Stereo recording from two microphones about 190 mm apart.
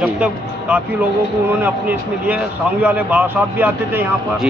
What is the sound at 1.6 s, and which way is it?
A man's voice, 10° right (ahead or behind).